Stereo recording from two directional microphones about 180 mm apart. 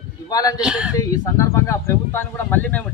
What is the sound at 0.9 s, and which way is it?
Speech, 15° left (ahead or behind).